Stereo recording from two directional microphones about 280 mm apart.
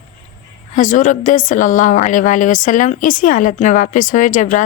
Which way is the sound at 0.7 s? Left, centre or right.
Left.